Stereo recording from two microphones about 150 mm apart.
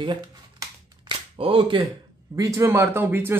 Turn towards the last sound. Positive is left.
turn(degrees=-15)  # may be behind; listen again after turning